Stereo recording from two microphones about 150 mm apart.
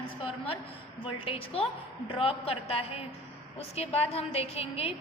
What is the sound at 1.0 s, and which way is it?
A woman's voice, 40° left (ahead or behind).